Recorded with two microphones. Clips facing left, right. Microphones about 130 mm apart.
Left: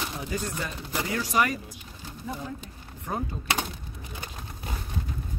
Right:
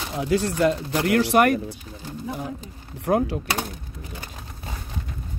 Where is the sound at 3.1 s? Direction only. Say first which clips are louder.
Right 11 dB; 90° right.